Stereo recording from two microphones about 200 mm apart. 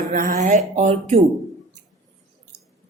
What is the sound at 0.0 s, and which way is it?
Speech, 45° right (ahead or behind).